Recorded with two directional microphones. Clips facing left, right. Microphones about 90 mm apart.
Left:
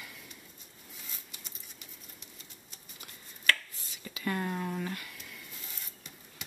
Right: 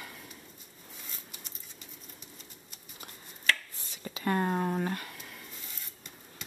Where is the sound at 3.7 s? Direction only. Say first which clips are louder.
Right 4 dB; 35° right (ahead or behind).